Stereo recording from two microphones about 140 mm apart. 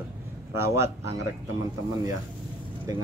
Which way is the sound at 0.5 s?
20° right (ahead or behind).